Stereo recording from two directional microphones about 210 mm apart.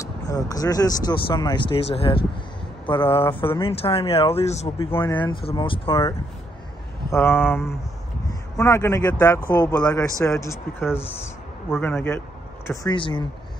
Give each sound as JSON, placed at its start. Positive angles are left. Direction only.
{"t": 0.3, "sound": "speech", "side_deg": 15}
{"t": 4.7, "sound": "speech", "side_deg": 10}
{"t": 5.1, "sound": "speech", "side_deg": 20}
{"t": 7.1, "sound": "speech", "side_deg": 10}
{"t": 11.0, "sound": "speech", "side_deg": 30}
{"t": 11.7, "sound": "speech", "side_deg": 10}
{"t": 12.6, "sound": "speech", "side_deg": 20}